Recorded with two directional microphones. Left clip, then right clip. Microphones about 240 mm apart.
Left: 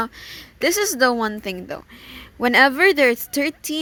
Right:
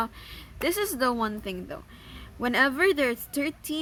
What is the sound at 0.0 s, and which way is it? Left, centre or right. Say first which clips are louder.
A woman's voice: left 5 dB; left.